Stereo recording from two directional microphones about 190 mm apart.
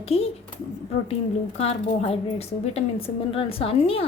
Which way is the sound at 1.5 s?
35° left (ahead or behind).